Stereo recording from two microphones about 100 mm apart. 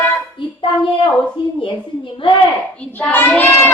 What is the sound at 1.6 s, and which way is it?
Speech, 60° left (ahead or behind).